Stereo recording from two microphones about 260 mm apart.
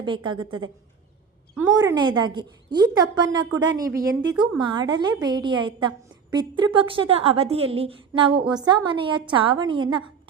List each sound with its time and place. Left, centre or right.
0.0 s a woman's voice: centre